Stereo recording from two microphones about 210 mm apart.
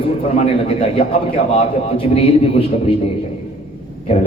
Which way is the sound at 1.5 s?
25° left (ahead or behind).